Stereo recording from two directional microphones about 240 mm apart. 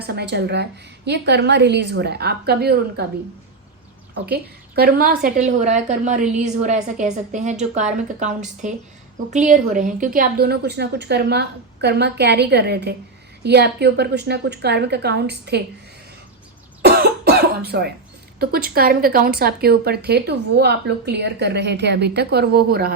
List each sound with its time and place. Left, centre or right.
0.0 s a woman's voice: right
4.3 s a woman's voice: right
16.8 s cough: right
18.3 s a woman's voice: right